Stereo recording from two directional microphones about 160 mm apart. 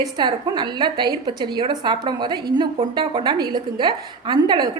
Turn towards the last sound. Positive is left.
turn(degrees=-30)  # may be behind; listen again after turning